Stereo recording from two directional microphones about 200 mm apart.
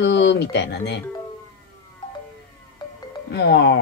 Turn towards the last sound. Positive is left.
turn(degrees=60)  # may be behind; listen again after turning